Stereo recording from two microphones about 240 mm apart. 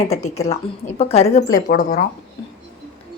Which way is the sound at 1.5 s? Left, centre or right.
Left.